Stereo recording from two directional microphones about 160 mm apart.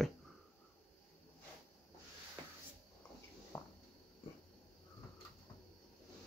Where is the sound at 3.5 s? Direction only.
15° left (ahead or behind).